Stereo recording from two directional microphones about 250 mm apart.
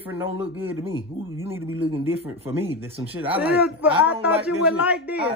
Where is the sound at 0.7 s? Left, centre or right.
Right.